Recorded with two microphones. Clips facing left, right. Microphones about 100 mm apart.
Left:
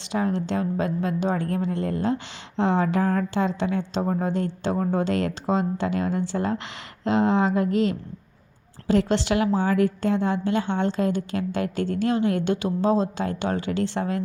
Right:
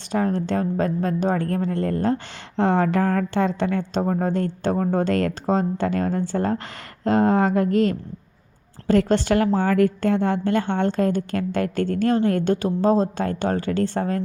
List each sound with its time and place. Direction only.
0.1 s a woman's voice: 45° right (ahead or behind)